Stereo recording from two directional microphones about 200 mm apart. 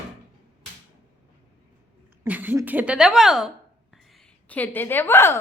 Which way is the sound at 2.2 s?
10° right (ahead or behind).